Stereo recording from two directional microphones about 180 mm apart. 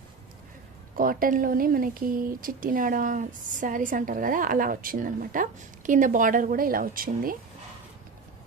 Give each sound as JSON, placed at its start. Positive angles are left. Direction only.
{"t": 0.9, "sound": "speech", "side_deg": -50}